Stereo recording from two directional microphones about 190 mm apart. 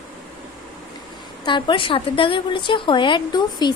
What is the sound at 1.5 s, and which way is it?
A woman's voice, 25° left (ahead or behind).